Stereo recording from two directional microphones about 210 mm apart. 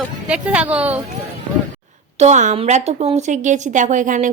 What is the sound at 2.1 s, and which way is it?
Speech, 35° right (ahead or behind).